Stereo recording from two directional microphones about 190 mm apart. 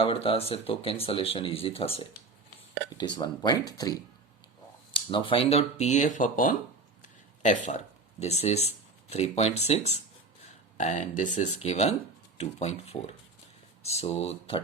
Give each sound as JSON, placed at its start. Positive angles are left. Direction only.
{"t": 0.0, "sound": "speech", "side_deg": 30}